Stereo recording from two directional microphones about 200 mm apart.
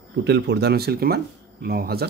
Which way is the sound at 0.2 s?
60° right (ahead or behind).